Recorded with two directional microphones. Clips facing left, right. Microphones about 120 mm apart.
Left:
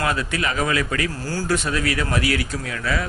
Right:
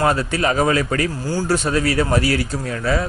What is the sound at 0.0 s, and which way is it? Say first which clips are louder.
A man's voice: right 5 dB; 40° right (ahead or behind).